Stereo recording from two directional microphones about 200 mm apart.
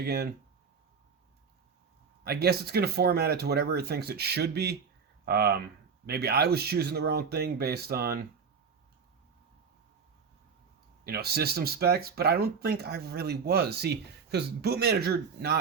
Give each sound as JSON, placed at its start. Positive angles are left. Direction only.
{"t": 0.0, "sound": "speech", "side_deg": -50}
{"t": 2.2, "sound": "speech", "side_deg": -55}
{"t": 11.0, "sound": "speech", "side_deg": -50}